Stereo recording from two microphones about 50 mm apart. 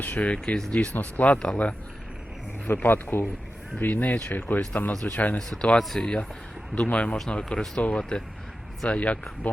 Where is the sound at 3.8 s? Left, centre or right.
Left.